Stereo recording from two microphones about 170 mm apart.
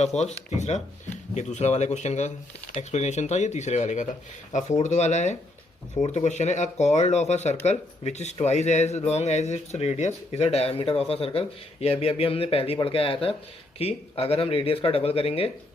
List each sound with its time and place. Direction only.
0.0 s speech: 40° left (ahead or behind)